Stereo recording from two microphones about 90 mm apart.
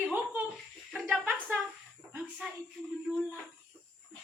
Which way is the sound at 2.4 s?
5° right (ahead or behind).